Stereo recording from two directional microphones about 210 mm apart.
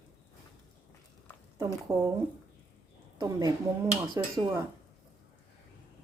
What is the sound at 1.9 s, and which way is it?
Speech, 15° right (ahead or behind).